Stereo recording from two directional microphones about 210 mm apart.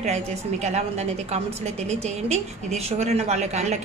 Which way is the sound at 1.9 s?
30° right (ahead or behind).